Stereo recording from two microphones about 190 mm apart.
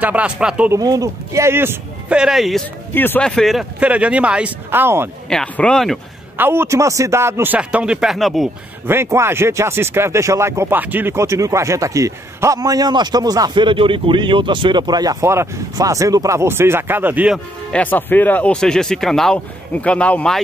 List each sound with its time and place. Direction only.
0.0 s speech: 5° right (ahead or behind)
0.7 s speech: 20° right (ahead or behind); by 2.6 s centre (ahead or behind)
2.9 s speech: 10° left (ahead or behind); by 5.1 s 10° right (ahead or behind)
5.3 s speech: 5° left (ahead or behind)
6.3 s speech: 10° right (ahead or behind)
8.8 s speech: 10° right (ahead or behind)
17.7 s speech: 10° left (ahead or behind)